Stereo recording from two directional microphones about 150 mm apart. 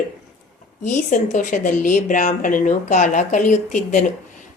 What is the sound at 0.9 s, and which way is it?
Speech, 60° left (ahead or behind).